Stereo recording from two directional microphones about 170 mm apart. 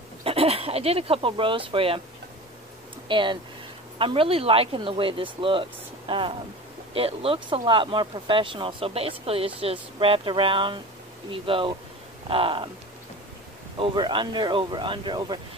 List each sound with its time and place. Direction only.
0.2 s speech: 35° right (ahead or behind)
3.1 s speech: 30° right (ahead or behind)
13.7 s speech: 30° right (ahead or behind)